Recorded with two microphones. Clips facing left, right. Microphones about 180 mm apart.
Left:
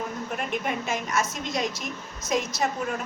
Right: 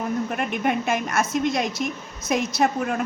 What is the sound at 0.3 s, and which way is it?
Speech, 65° right (ahead or behind).